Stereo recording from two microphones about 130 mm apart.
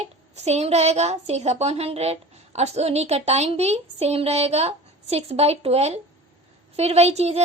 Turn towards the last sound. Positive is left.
turn(degrees=-55)  # may be behind; listen again after turning